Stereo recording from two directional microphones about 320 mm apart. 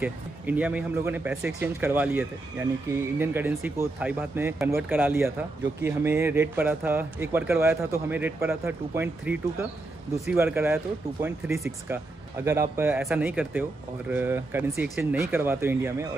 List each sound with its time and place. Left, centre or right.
0.0 s speech: centre